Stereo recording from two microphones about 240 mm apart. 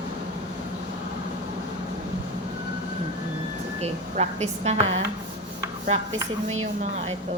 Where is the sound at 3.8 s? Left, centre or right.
Right.